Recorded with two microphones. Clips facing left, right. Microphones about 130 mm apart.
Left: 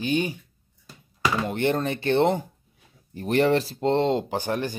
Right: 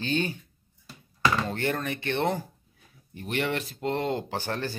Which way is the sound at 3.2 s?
40° left (ahead or behind).